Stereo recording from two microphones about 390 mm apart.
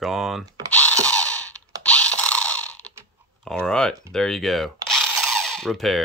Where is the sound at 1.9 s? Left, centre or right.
Centre.